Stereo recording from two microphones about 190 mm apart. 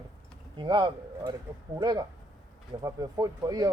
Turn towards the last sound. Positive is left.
turn(degrees=-20)  # may be behind; listen again after turning